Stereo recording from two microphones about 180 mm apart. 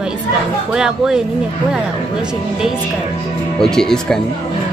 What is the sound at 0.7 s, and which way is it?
Speech, 5° right (ahead or behind).